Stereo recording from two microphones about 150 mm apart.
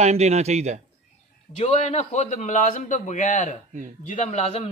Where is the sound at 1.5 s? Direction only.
45° left (ahead or behind).